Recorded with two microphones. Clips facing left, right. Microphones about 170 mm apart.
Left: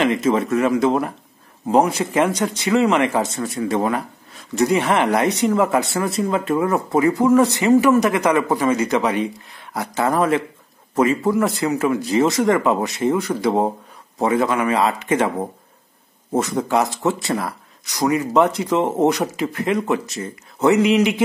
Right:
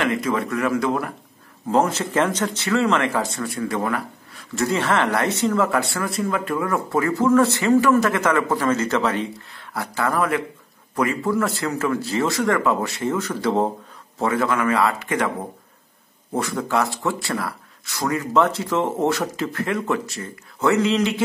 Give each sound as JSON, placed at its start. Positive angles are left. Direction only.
{"t": 0.0, "sound": "a man's voice", "side_deg": 25}